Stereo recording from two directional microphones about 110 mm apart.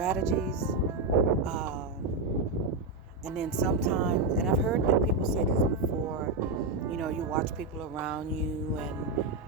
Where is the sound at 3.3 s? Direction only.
5° right (ahead or behind).